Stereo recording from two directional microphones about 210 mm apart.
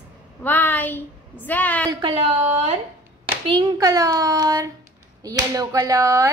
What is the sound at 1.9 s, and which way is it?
A woman's voice, 25° right (ahead or behind).